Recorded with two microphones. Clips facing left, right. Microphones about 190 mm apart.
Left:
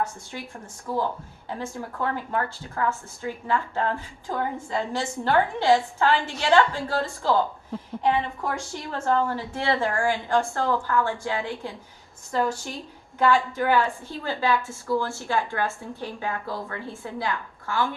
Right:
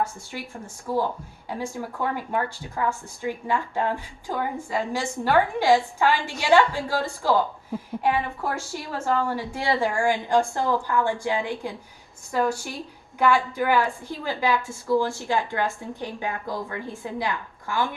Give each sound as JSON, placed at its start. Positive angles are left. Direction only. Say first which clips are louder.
{"t": 0.0, "sound": "a woman's voice", "louder": "right 1 dB", "side_deg": -10}
{"t": 13.1, "sound": "a woman's voice", "louder": "even", "side_deg": -15}